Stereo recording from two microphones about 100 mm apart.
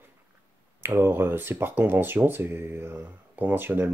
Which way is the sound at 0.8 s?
20° right (ahead or behind).